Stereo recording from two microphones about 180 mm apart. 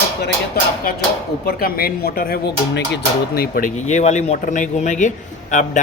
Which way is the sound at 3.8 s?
40° left (ahead or behind).